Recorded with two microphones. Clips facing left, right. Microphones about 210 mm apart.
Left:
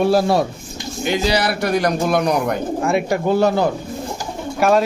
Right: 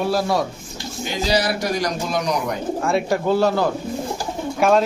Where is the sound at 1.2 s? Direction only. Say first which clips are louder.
Right 2 dB; 60° left (ahead or behind).